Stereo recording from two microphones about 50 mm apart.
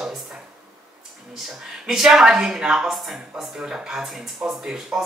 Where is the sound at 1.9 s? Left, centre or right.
Centre.